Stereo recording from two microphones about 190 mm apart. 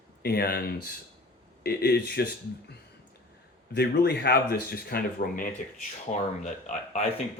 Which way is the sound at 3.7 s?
60° left (ahead or behind).